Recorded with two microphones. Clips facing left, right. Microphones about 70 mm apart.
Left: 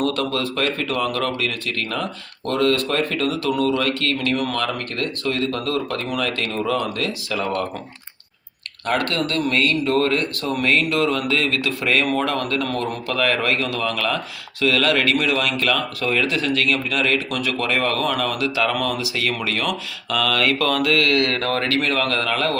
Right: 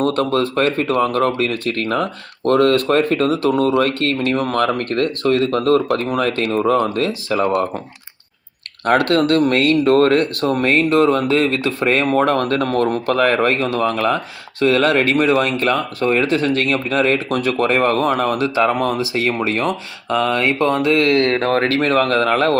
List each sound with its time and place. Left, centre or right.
0.0 s speech: right
8.9 s speech: right